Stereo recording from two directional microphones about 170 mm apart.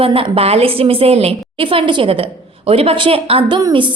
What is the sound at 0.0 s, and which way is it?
A woman's voice, 35° right (ahead or behind).